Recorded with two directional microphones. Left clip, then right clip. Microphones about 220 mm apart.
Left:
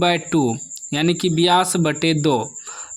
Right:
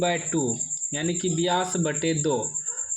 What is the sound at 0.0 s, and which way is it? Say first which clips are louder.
A man's voice: left 7 dB; 45° left (ahead or behind).